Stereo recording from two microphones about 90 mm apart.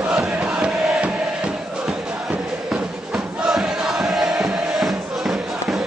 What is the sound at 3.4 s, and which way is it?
Music, 5° right (ahead or behind).